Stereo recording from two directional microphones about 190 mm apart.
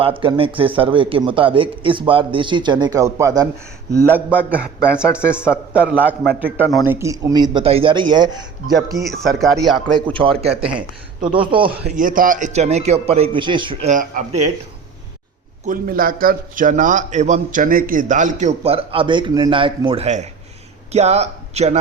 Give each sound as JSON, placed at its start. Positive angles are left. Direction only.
{"t": 0.0, "sound": "a man's voice", "side_deg": -25}
{"t": 8.9, "sound": "a man's voice", "side_deg": 0}
{"t": 10.1, "sound": "a man's voice", "side_deg": -25}
{"t": 10.6, "sound": "speech", "side_deg": -5}
{"t": 11.2, "sound": "a man's voice", "side_deg": -25}
{"t": 11.9, "sound": "a man's voice", "side_deg": -45}
{"t": 13.9, "sound": "speech", "side_deg": -45}
{"t": 15.6, "sound": "a man's voice", "side_deg": -45}